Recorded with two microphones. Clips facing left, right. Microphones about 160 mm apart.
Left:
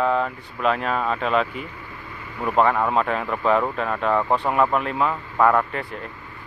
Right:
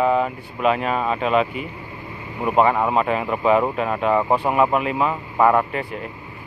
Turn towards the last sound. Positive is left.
turn(degrees=-10)  # may be behind; listen again after turning